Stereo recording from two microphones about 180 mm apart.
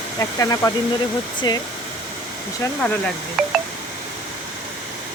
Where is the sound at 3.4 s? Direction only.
Centre (ahead or behind).